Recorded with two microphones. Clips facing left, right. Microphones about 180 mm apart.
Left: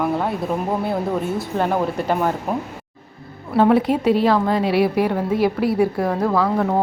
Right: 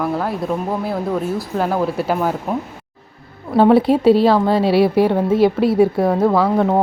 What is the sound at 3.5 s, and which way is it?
A woman's voice, 30° right (ahead or behind).